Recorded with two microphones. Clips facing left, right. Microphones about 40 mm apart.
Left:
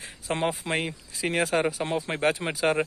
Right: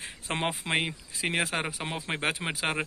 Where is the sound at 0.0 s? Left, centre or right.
Right.